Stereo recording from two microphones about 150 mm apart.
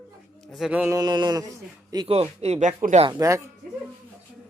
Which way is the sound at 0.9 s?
25° right (ahead or behind).